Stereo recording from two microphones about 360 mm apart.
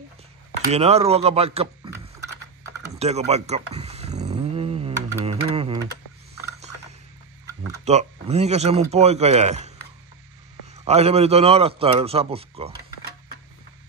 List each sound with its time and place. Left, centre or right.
0.7 s speech: centre
3.0 s a sound: centre
7.6 s speech: centre
10.9 s a man's voice: centre